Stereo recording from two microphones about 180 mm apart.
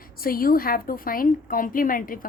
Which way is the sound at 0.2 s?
55° left (ahead or behind).